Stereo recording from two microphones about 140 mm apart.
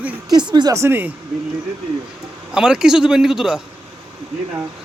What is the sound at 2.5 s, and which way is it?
A man's voice, 5° right (ahead or behind).